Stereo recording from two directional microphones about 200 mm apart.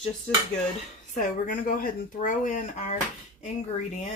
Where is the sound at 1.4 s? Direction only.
45° left (ahead or behind).